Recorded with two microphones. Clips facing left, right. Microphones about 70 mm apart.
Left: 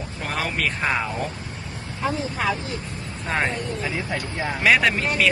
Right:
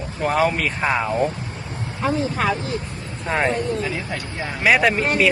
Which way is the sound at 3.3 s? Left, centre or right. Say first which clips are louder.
Right 4 dB; centre.